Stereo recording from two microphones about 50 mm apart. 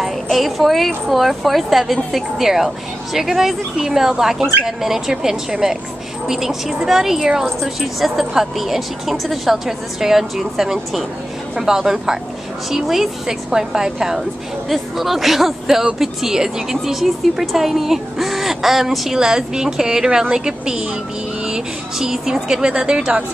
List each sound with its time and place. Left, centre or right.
0.0 s speech: centre